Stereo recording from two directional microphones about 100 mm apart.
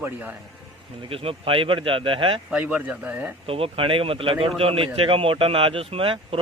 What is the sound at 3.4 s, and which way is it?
A man's voice, 70° right (ahead or behind).